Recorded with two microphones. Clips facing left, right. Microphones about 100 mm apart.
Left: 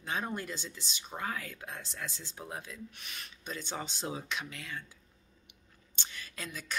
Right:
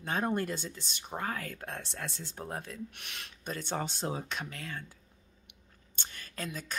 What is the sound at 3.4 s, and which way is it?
Speech, 50° right (ahead or behind).